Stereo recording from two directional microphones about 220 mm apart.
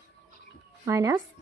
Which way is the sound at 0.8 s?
15° right (ahead or behind).